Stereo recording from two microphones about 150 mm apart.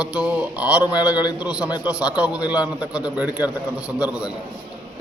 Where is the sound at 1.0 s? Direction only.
25° left (ahead or behind).